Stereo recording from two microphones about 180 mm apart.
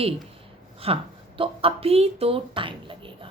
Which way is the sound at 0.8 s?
35° right (ahead or behind).